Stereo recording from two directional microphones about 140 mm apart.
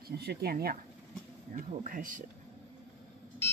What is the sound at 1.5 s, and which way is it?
Speech, 75° right (ahead or behind).